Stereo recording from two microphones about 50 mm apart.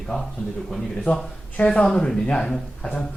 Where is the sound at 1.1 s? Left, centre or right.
Left.